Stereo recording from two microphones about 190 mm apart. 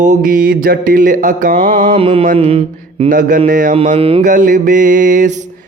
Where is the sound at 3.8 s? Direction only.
30° right (ahead or behind).